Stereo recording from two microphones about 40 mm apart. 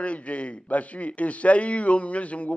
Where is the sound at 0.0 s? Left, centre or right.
Left.